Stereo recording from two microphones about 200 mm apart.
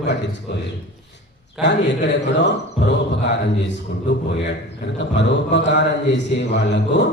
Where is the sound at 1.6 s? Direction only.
60° left (ahead or behind).